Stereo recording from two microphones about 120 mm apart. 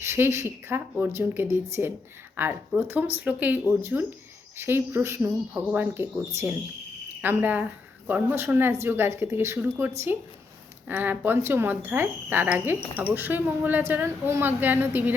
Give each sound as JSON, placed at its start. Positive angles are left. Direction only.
{"t": 0.0, "sound": "a woman's voice", "side_deg": -20}